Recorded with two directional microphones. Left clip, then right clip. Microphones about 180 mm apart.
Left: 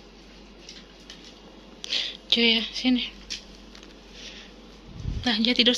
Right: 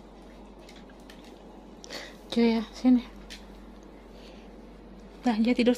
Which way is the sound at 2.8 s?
55° right (ahead or behind).